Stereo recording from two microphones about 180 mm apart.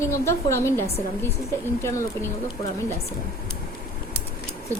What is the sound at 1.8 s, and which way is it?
Speech, 15° left (ahead or behind).